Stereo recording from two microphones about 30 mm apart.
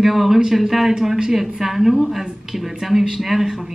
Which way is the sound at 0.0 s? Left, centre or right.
Centre.